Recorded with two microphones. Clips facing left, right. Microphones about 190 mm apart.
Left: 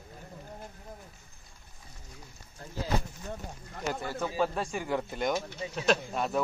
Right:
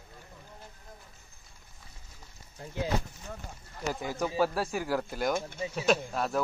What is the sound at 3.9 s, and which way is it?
A man's voice, 15° right (ahead or behind).